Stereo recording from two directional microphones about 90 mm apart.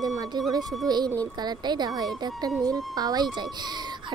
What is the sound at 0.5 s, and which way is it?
A child's voice, 45° right (ahead or behind).